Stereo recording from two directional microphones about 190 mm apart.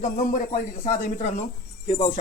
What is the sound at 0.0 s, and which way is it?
Speech, 40° left (ahead or behind).